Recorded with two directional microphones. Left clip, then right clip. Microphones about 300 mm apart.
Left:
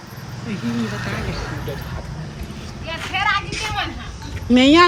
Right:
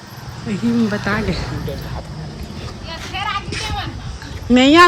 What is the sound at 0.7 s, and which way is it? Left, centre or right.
Speech, right.